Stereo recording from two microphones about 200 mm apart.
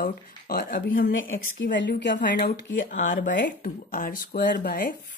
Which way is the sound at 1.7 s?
65° left (ahead or behind).